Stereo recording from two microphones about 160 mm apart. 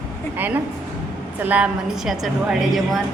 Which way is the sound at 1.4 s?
10° right (ahead or behind).